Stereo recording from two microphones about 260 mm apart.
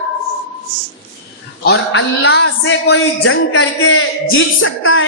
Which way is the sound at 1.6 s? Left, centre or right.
Left.